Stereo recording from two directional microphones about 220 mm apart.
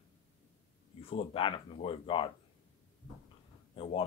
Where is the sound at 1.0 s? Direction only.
25° left (ahead or behind).